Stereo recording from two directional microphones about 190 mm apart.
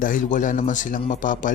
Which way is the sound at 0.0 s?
45° left (ahead or behind).